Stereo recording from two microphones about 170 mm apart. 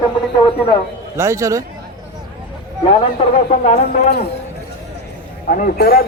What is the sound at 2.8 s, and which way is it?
A man's voice, 30° left (ahead or behind).